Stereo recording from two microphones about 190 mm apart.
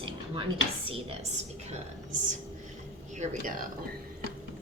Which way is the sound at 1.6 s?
40° right (ahead or behind).